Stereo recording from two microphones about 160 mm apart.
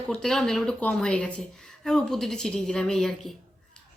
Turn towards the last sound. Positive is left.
turn(degrees=5)  # may be behind; listen again after turning